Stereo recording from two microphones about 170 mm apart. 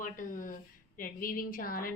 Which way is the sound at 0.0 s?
50° left (ahead or behind).